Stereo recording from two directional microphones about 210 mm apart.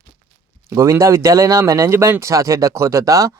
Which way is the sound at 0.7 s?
15° right (ahead or behind).